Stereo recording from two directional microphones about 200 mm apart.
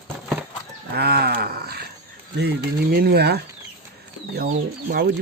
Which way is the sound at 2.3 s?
50° right (ahead or behind).